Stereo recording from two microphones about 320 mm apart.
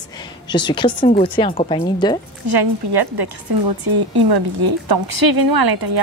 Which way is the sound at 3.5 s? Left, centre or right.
Right.